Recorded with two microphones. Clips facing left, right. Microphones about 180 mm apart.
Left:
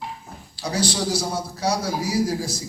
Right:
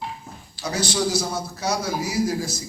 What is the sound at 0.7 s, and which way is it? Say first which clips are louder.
A man's voice: even; 35° left (ahead or behind).